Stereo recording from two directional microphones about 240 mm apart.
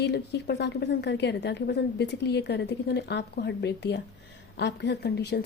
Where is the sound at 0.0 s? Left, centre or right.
Left.